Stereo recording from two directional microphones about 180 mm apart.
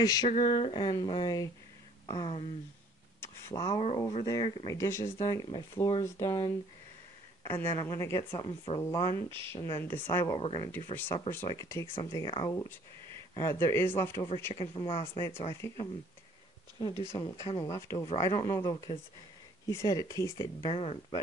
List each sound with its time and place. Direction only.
0.0 s speech: 20° left (ahead or behind)
0.3 s speech: 40° left (ahead or behind); by 3.8 s 20° left (ahead or behind)
3.8 s speech: 30° left (ahead or behind); by 10.3 s 10° left (ahead or behind)
10.3 s speech: 25° left (ahead or behind)
14.5 s speech: 25° left (ahead or behind)
17.0 s speech: 15° left (ahead or behind)
20.7 s speech: 30° left (ahead or behind)